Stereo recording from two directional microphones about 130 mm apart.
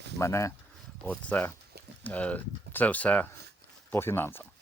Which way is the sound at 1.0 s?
10° left (ahead or behind).